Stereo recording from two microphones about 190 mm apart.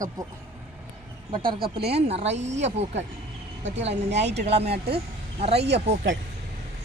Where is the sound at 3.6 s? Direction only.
70° right (ahead or behind).